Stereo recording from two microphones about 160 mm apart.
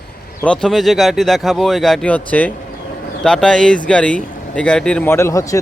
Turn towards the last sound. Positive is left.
turn(degrees=20)  # may be behind; listen again after turning